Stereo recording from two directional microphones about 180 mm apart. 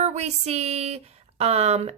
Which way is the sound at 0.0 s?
40° right (ahead or behind).